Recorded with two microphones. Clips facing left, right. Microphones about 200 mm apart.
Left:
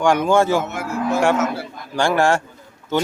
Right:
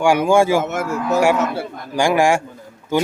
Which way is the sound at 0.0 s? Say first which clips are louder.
Right 2 dB; 10° right (ahead or behind).